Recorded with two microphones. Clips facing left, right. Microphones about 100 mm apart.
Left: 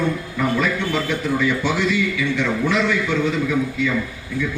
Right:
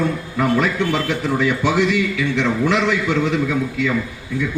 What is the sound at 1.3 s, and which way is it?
A man's voice, 65° right (ahead or behind).